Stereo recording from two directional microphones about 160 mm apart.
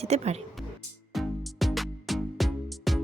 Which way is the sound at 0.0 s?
40° right (ahead or behind).